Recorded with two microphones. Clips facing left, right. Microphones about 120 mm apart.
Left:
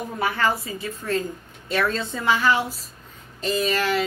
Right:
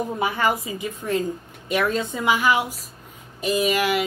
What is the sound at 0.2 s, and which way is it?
A woman's voice, 15° right (ahead or behind).